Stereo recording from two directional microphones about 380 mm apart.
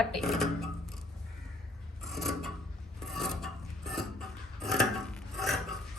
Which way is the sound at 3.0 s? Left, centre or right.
Centre.